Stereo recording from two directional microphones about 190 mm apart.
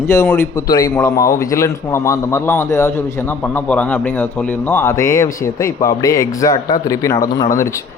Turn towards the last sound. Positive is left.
turn(degrees=20)  # may be behind; listen again after turning